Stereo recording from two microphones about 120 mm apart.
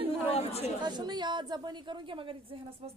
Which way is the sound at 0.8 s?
35° right (ahead or behind).